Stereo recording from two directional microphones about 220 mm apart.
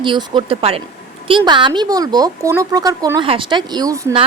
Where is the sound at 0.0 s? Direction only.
20° right (ahead or behind).